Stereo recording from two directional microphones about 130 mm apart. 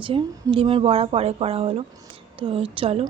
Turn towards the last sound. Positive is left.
turn(degrees=-45)  # may be behind; listen again after turning